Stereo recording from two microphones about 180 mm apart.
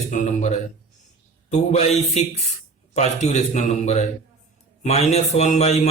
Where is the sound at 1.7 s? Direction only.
35° left (ahead or behind).